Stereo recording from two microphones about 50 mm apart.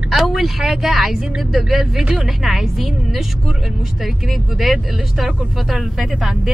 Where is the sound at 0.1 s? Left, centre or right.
Centre.